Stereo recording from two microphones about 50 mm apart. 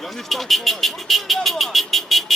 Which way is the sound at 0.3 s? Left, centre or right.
Centre.